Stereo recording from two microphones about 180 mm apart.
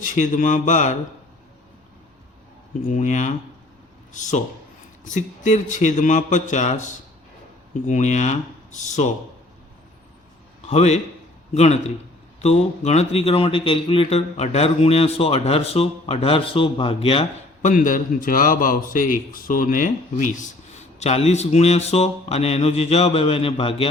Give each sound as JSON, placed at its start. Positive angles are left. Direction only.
{"t": 0.0, "sound": "speech", "side_deg": 45}
{"t": 2.8, "sound": "a man's voice", "side_deg": 45}
{"t": 10.7, "sound": "a man's voice", "side_deg": 35}